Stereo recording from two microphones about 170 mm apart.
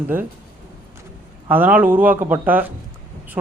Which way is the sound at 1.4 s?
10° right (ahead or behind).